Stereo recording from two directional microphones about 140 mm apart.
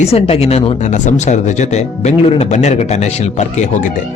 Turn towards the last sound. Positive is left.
turn(degrees=60)  # may be behind; listen again after turning